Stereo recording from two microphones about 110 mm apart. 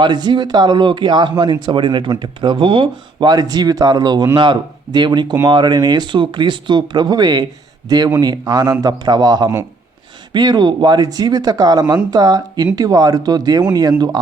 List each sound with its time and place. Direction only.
0.0 s speech: 40° right (ahead or behind)